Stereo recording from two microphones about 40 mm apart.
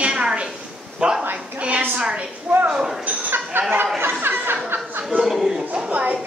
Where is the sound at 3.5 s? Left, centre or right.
Right.